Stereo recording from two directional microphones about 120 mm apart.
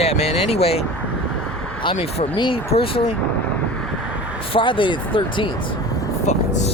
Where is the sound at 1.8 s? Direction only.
50° left (ahead or behind).